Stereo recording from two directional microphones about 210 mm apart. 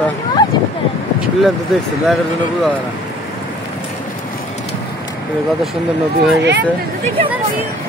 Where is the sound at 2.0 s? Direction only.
Centre (ahead or behind).